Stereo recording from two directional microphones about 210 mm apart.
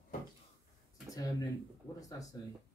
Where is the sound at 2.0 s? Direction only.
15° left (ahead or behind).